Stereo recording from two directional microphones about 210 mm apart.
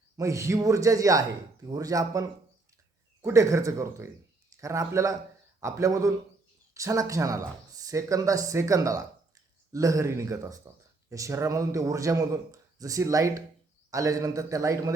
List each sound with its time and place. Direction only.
0.2 s a man's voice: 15° right (ahead or behind)